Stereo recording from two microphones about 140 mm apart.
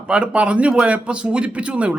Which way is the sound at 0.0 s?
10° right (ahead or behind).